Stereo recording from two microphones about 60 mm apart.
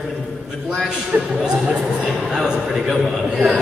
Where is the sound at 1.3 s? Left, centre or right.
Centre.